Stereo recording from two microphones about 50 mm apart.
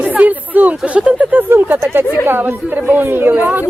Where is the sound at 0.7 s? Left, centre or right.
Right.